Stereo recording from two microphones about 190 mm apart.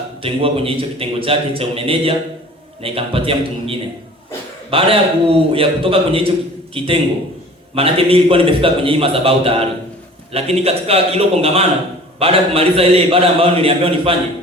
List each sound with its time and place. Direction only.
0.2 s a man's voice: 30° right (ahead or behind)